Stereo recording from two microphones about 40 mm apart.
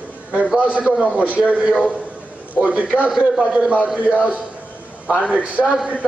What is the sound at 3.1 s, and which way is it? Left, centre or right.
Speech, centre.